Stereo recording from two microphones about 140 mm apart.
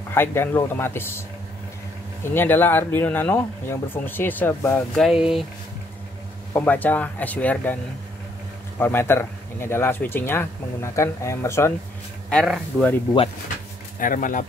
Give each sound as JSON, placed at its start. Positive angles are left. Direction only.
{"t": 0.1, "sound": "speech", "side_deg": 15}
{"t": 2.2, "sound": "speech", "side_deg": 15}
{"t": 5.0, "sound": "speech", "side_deg": -5}
{"t": 6.5, "sound": "speech", "side_deg": 15}
{"t": 8.7, "sound": "speech", "side_deg": 15}
{"t": 12.3, "sound": "speech", "side_deg": 0}
{"t": 13.9, "sound": "speech", "side_deg": 80}